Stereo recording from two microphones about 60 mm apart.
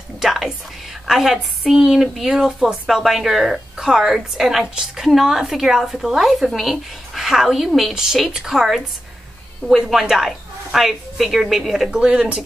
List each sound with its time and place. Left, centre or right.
0.2 s a woman's voice: centre